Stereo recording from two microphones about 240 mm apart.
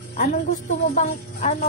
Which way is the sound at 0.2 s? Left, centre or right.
Left.